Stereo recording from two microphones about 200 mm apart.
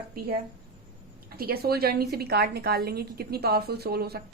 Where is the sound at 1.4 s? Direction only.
50° right (ahead or behind).